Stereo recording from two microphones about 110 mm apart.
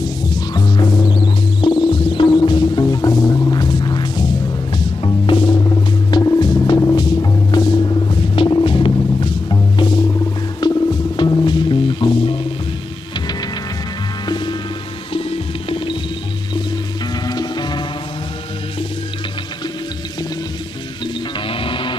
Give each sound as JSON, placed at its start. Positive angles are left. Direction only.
{"t": 0.0, "sound": "music", "side_deg": 40}
{"t": 6.1, "sound": "music", "side_deg": 40}
{"t": 14.2, "sound": "music", "side_deg": 45}
{"t": 15.1, "sound": "music", "side_deg": 55}
{"t": 17.3, "sound": "music", "side_deg": 40}
{"t": 21.5, "sound": "music", "side_deg": 55}